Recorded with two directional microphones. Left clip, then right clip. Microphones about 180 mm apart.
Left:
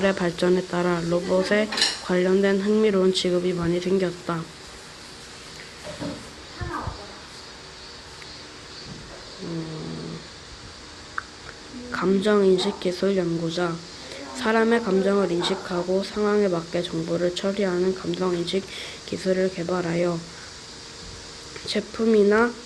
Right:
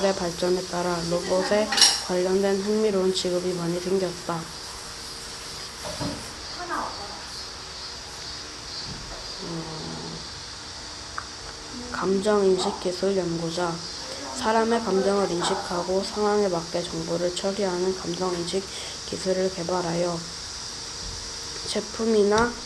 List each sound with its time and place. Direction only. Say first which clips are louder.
0.0 s speech: left 2 dB; 60° left (ahead or behind)
11.9 s speech: left 2 dB; 60° left (ahead or behind)
21.7 s speech: left 3 dB; 55° left (ahead or behind)